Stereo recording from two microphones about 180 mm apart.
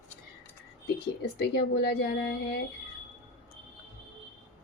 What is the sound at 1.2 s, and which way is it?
Speech, 65° left (ahead or behind).